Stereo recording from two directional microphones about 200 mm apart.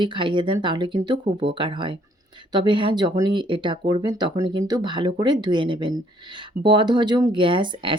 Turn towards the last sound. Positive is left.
turn(degrees=-25)  # may be behind; listen again after turning